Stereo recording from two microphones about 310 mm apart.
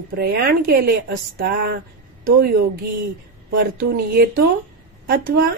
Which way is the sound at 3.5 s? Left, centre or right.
Right.